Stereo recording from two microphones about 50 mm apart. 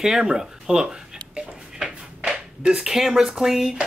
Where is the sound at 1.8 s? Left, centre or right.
Centre.